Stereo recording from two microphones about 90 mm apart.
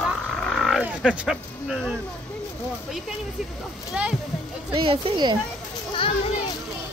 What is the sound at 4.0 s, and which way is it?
Speech, 15° right (ahead or behind).